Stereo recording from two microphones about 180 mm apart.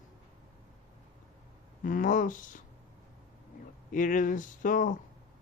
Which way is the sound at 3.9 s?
45° left (ahead or behind).